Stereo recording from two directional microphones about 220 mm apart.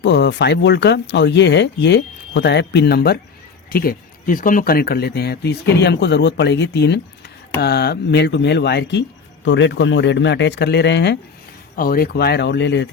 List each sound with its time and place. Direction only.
0.0 s speech: 50° left (ahead or behind)